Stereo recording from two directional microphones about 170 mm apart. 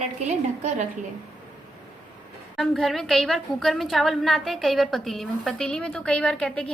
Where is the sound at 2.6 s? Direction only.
Centre (ahead or behind).